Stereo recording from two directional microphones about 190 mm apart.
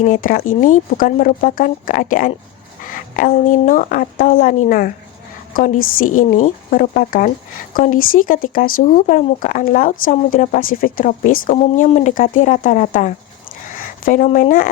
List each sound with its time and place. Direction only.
0.0 s speech: 45° left (ahead or behind)
13.7 s a sound: 45° left (ahead or behind)
14.3 s speech: 45° left (ahead or behind)